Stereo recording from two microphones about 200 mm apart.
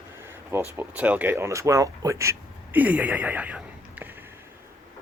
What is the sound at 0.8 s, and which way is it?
Speech, 10° right (ahead or behind).